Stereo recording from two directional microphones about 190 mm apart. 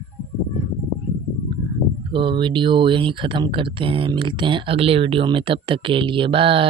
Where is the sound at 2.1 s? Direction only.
25° right (ahead or behind).